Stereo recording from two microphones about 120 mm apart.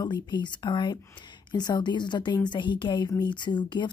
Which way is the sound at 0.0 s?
35° left (ahead or behind).